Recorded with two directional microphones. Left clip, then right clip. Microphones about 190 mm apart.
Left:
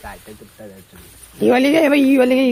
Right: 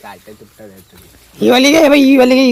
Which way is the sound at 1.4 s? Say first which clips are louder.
Right 5 dB; 25° right (ahead or behind).